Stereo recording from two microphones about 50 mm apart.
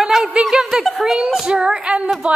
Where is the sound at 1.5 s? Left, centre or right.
Centre.